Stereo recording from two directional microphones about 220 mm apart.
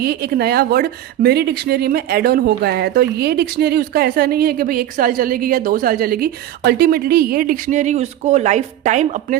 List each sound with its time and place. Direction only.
0.0 s speech: 45° right (ahead or behind)